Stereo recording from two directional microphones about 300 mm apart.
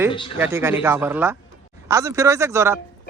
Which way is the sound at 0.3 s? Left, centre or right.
Centre.